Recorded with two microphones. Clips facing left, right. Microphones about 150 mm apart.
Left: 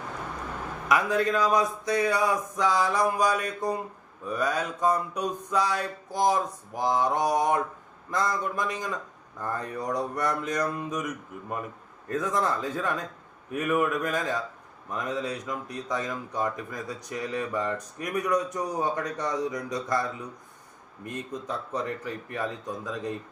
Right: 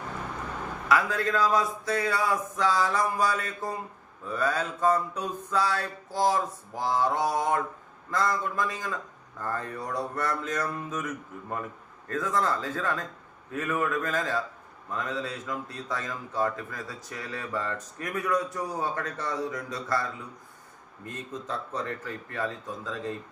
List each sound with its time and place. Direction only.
0.9 s speech: 15° left (ahead or behind)